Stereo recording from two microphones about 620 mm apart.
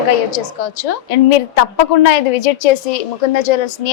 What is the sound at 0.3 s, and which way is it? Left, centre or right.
A woman's voice, left.